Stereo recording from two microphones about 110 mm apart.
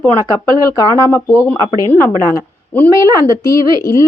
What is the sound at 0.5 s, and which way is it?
Speech, 30° left (ahead or behind).